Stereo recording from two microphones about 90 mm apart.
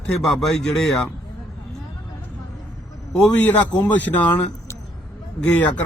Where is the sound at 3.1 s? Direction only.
10° left (ahead or behind).